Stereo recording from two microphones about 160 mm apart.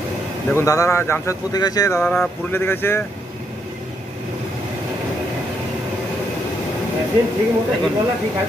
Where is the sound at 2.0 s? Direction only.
Centre (ahead or behind).